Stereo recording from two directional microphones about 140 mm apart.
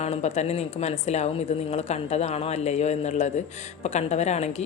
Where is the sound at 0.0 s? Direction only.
50° left (ahead or behind).